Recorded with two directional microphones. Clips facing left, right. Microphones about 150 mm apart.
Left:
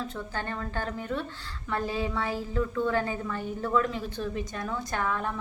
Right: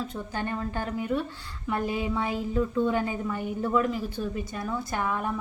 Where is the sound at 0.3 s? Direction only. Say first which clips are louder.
Right 3 dB; 15° right (ahead or behind).